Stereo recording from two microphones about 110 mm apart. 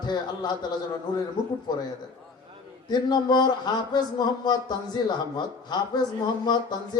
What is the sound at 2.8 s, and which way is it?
Speech, 40° left (ahead or behind).